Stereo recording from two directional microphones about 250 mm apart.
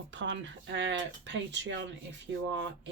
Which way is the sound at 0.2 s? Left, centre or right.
Right.